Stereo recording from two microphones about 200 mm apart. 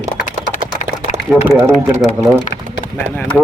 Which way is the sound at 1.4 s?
10° right (ahead or behind).